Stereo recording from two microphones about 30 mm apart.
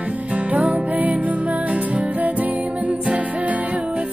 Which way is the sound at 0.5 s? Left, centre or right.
Right.